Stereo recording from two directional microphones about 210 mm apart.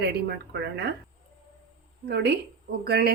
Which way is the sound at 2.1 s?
55° right (ahead or behind).